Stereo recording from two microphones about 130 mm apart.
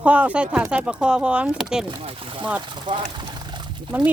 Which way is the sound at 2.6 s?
35° right (ahead or behind).